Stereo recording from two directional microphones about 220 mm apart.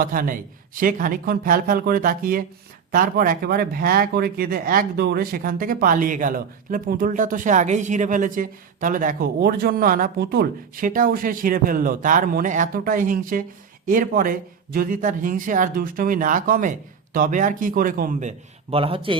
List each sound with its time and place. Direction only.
0.0 s speech: 40° right (ahead or behind); by 19.2 s 25° right (ahead or behind)